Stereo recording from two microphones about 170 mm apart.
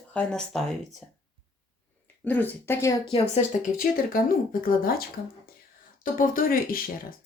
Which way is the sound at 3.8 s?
55° left (ahead or behind).